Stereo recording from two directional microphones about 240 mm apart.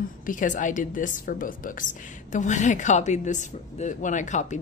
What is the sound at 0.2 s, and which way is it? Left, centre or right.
A woman's voice, left.